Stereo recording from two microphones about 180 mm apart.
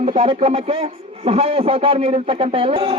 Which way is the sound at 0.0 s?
40° right (ahead or behind).